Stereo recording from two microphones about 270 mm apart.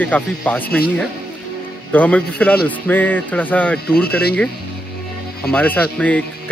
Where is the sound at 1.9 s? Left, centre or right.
Centre.